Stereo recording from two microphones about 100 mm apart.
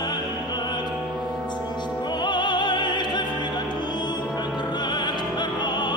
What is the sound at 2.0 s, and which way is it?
Opera, 45° left (ahead or behind).